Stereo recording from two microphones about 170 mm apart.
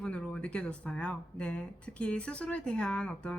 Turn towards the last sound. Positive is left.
turn(degrees=5)  # may be behind; listen again after turning